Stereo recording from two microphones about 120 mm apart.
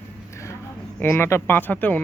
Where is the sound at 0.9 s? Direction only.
20° left (ahead or behind).